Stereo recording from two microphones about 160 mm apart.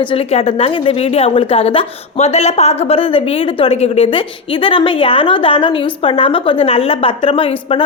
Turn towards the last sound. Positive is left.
turn(degrees=35)  # may be behind; listen again after turning